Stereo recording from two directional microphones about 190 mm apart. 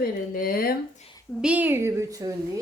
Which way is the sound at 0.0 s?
50° left (ahead or behind).